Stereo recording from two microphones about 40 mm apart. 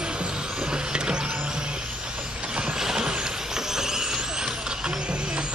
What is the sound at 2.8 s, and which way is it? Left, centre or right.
Vehicle, centre.